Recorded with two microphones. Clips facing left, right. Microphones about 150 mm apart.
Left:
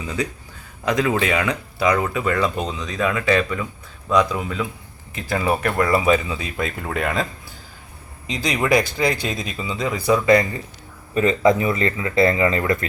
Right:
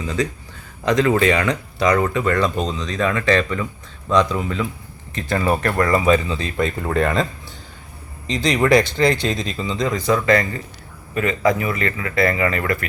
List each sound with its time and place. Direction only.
0.9 s speech: 10° left (ahead or behind)
8.3 s speech: 5° left (ahead or behind)
11.1 s speech: 25° left (ahead or behind)